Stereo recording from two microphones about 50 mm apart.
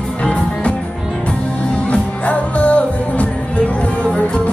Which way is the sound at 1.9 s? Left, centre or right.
Left.